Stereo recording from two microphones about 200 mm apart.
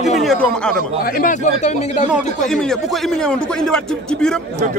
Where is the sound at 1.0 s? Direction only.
45° left (ahead or behind).